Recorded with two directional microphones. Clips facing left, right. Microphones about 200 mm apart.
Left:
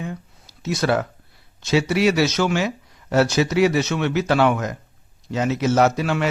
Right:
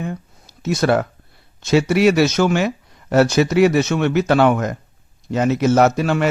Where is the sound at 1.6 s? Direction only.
50° right (ahead or behind).